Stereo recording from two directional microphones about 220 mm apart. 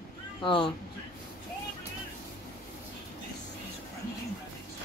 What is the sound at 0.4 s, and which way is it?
Speech, 20° left (ahead or behind).